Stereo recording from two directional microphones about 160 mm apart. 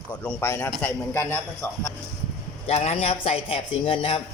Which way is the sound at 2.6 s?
40° left (ahead or behind).